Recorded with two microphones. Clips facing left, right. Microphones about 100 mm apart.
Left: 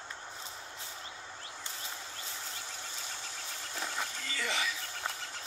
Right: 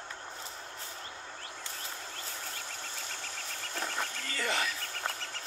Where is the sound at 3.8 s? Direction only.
10° left (ahead or behind).